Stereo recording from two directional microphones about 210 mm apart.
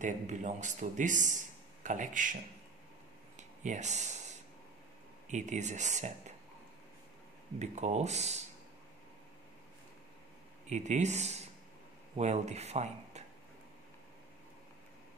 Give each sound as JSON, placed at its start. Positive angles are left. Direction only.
{"t": 0.0, "sound": "a man's voice", "side_deg": -35}
{"t": 3.3, "sound": "a sound", "side_deg": -35}
{"t": 5.3, "sound": "a man's voice", "side_deg": -35}
{"t": 7.5, "sound": "a man's voice", "side_deg": -35}
{"t": 10.7, "sound": "a man's voice", "side_deg": -35}